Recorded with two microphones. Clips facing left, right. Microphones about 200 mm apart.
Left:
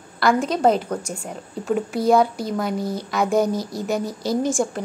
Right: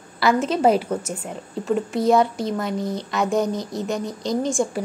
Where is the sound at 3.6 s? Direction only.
20° right (ahead or behind).